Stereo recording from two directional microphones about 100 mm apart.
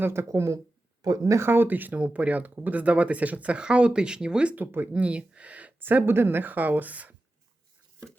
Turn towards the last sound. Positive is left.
turn(degrees=-15)  # may be behind; listen again after turning